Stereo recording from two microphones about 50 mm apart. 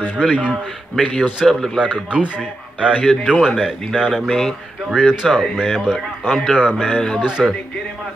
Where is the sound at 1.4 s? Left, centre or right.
Centre.